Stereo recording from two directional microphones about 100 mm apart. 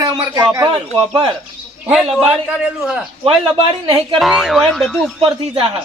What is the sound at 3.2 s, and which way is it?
Speech, 60° right (ahead or behind).